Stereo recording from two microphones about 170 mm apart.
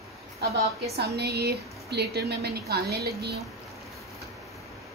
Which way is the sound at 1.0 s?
70° right (ahead or behind).